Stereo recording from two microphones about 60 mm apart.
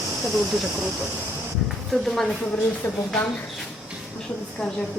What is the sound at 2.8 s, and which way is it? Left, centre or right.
Speech, left.